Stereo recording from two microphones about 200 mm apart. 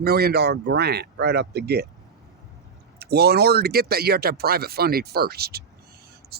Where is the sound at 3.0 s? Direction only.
50° right (ahead or behind).